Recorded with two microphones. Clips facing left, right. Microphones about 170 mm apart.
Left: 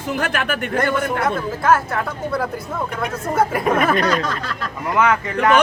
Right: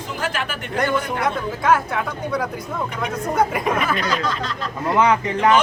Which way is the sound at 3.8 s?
55° left (ahead or behind).